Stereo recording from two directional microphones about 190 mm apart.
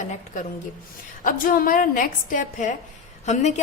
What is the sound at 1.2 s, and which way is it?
A woman's voice, 50° left (ahead or behind).